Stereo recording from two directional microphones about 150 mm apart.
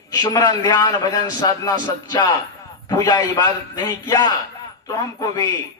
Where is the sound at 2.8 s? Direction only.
25° left (ahead or behind).